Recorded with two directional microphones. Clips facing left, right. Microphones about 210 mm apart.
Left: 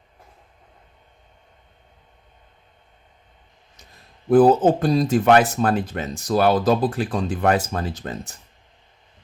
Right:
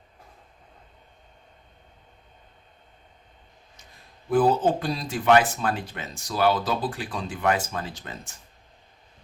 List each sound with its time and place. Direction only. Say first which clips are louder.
4.3 s speech: left 7 dB; 45° left (ahead or behind)